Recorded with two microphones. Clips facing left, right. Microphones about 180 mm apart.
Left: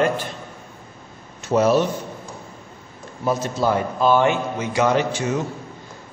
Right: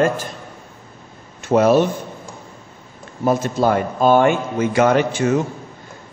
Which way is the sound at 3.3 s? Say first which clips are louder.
Right 4 dB; 50° right (ahead or behind).